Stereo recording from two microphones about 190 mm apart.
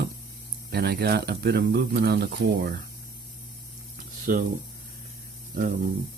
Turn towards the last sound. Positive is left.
turn(degrees=-45)  # may be behind; listen again after turning